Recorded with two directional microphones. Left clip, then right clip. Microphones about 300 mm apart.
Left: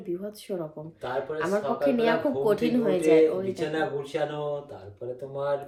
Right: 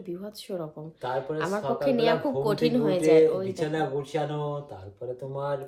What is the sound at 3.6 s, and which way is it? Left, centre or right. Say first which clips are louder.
Speech: even; right.